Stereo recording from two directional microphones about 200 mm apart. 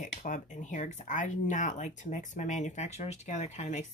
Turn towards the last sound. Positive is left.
turn(degrees=35)  # may be behind; listen again after turning